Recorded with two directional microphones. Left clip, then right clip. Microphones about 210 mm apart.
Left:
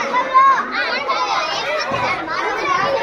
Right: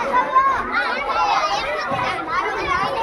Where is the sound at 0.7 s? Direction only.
55° right (ahead or behind).